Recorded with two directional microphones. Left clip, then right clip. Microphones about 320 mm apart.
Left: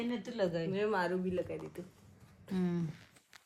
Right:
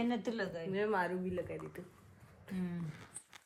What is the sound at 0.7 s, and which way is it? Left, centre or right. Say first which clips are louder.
Speech: left 1 dB; centre.